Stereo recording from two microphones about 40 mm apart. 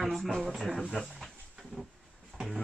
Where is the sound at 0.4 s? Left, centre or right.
Centre.